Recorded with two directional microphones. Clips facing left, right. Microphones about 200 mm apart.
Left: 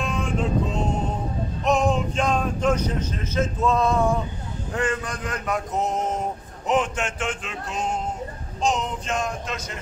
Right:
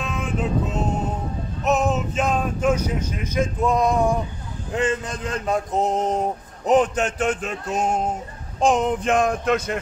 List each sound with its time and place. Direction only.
0.0 s vehicle: 5° right (ahead or behind)
1.6 s speech: 5° right (ahead or behind)
4.7 s a sound: 20° right (ahead or behind); by 8.0 s 50° right (ahead or behind)
8.5 s speech: 55° right (ahead or behind)